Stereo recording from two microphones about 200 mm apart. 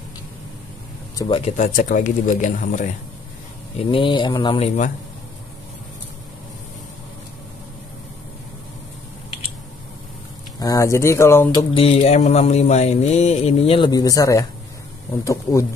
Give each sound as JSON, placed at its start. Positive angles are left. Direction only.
{"t": 1.1, "sound": "speech", "side_deg": 25}
{"t": 3.9, "sound": "speech", "side_deg": 25}
{"t": 10.6, "sound": "speech", "side_deg": 15}
{"t": 11.7, "sound": "speech", "side_deg": 30}